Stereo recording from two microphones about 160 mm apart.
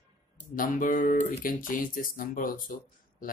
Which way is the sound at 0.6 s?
55° left (ahead or behind).